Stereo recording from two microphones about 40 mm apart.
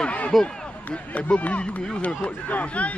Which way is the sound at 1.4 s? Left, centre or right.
Left.